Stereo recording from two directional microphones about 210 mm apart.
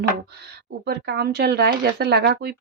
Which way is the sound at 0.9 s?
50° right (ahead or behind).